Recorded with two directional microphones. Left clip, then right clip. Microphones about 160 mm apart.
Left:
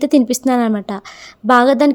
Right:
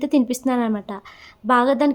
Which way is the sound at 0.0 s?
40° left (ahead or behind).